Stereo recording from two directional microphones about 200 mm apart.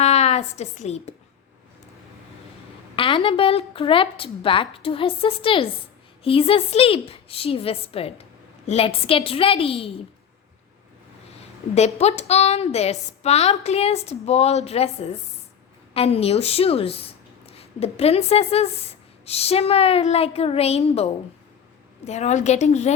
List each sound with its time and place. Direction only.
0.0 s a woman's voice: 35° left (ahead or behind)
2.9 s a woman's voice: 25° left (ahead or behind)
11.3 s a woman's voice: 35° left (ahead or behind)